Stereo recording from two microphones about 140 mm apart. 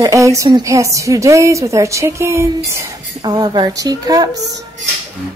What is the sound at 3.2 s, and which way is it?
A woman's voice, 30° right (ahead or behind).